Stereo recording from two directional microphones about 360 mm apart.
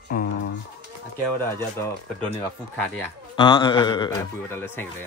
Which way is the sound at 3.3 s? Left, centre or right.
Centre.